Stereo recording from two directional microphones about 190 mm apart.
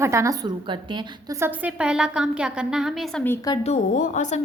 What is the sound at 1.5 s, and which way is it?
A woman's voice, 5° right (ahead or behind).